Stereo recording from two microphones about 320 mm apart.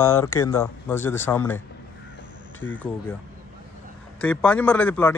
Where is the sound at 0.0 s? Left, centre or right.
Centre.